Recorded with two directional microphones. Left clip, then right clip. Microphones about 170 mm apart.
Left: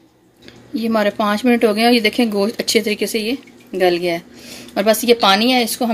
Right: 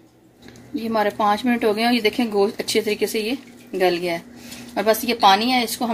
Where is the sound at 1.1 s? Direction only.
60° left (ahead or behind).